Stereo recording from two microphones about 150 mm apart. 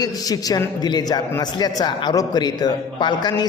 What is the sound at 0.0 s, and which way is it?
A man's voice, 25° left (ahead or behind).